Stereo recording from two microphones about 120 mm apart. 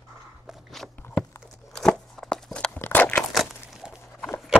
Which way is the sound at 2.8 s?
15° left (ahead or behind).